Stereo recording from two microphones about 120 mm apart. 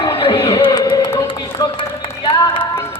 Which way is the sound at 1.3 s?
40° left (ahead or behind).